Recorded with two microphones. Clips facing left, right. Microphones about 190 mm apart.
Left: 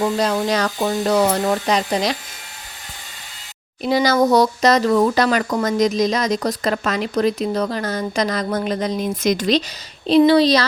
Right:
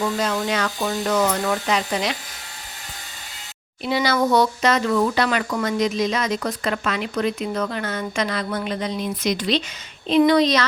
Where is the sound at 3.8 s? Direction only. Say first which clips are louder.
Left 4 dB; 40° left (ahead or behind).